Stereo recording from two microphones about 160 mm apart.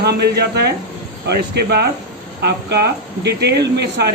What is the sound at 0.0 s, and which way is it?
Speech, 90° right.